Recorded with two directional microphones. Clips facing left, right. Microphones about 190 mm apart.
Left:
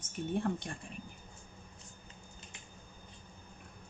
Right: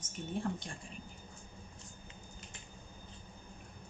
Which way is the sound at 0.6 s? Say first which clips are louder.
Left 4 dB; 55° left (ahead or behind).